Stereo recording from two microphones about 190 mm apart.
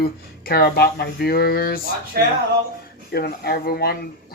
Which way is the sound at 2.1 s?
55° right (ahead or behind).